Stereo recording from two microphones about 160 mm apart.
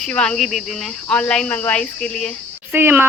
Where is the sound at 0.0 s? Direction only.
5° left (ahead or behind).